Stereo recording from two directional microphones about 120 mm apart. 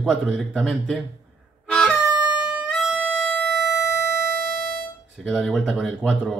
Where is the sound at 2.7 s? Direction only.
5° right (ahead or behind).